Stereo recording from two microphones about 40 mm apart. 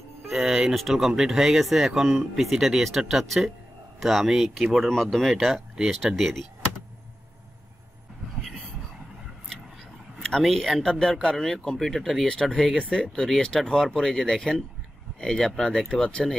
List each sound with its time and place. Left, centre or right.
0.3 s speech: centre
4.8 s speech: centre
10.5 s speech: centre
12.3 s speech: centre
16.1 s speech: left